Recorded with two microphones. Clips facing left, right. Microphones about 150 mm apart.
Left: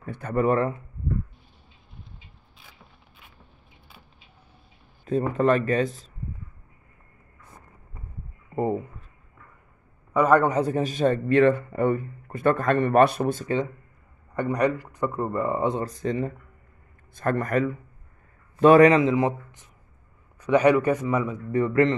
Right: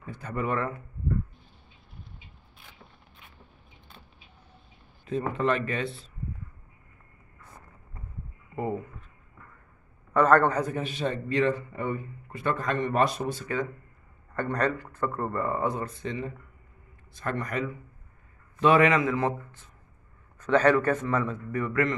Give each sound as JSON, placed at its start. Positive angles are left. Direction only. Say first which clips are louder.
{"t": 0.0, "sound": "a man's voice", "louder": "left 8 dB", "side_deg": 55}
{"t": 5.0, "sound": "a man's voice", "louder": "left 5 dB", "side_deg": 45}
{"t": 10.1, "sound": "speech", "louder": "left 2 dB", "side_deg": 10}
{"t": 10.6, "sound": "a man's voice", "louder": "left 7 dB", "side_deg": 35}
{"t": 14.3, "sound": "speech", "louder": "left 4 dB", "side_deg": 15}
{"t": 15.8, "sound": "a man's voice", "louder": "left 6 dB", "side_deg": 40}
{"t": 19.1, "sound": "speech", "louder": "left 4 dB", "side_deg": 15}
{"t": 21.5, "sound": "a man's voice", "louder": "left 9 dB", "side_deg": 30}